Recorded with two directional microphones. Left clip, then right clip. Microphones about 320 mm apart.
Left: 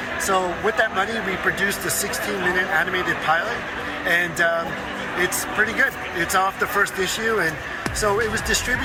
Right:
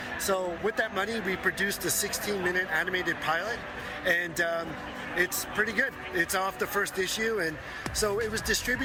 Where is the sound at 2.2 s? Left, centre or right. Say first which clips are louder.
Left 8 dB; right.